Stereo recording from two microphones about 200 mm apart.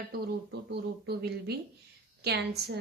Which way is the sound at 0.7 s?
55° right (ahead or behind).